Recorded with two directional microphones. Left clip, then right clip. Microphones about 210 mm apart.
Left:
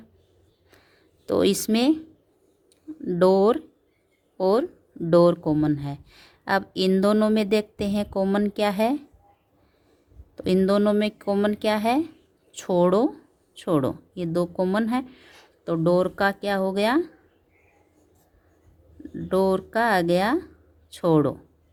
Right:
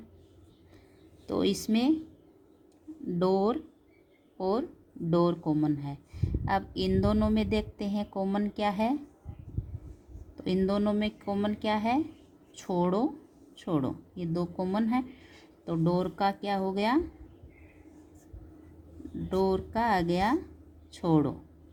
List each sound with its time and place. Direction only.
1.3 s speech: 40° left (ahead or behind)
3.2 s speech: 45° left (ahead or behind)
10.3 s speech: 40° left (ahead or behind)
19.3 s speech: 40° left (ahead or behind)